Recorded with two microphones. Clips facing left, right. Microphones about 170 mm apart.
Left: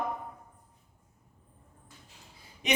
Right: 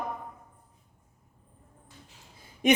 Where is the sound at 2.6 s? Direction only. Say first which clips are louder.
Right 7 dB; 50° right (ahead or behind).